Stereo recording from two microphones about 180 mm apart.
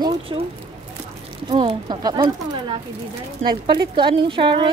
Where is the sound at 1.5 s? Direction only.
30° right (ahead or behind).